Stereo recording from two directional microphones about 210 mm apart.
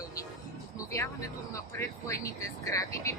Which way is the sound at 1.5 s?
15° left (ahead or behind).